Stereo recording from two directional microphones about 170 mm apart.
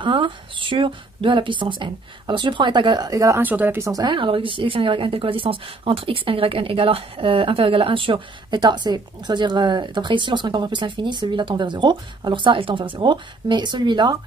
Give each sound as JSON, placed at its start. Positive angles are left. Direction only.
{"t": 0.0, "sound": "speech", "side_deg": -30}